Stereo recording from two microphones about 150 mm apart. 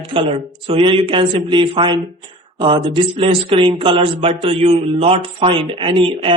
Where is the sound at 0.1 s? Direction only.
35° right (ahead or behind).